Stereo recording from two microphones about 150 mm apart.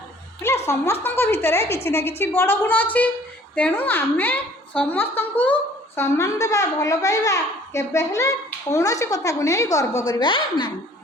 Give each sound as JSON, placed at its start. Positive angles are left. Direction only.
{"t": 0.7, "sound": "a woman's voice", "side_deg": 20}
{"t": 10.1, "sound": "a woman's voice", "side_deg": 30}